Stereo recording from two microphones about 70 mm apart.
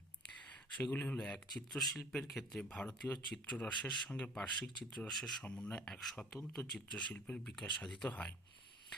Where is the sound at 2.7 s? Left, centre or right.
Centre.